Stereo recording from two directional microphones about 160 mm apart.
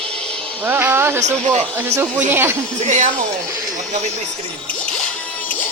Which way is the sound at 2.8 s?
45° right (ahead or behind).